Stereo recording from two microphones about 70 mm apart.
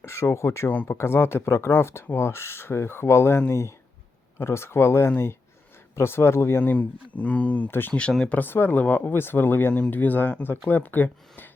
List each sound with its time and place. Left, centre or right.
0.0 s speech: left